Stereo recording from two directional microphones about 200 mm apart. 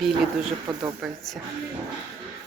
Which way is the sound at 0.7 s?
25° right (ahead or behind).